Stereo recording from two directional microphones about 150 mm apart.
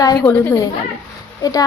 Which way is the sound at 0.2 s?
10° left (ahead or behind).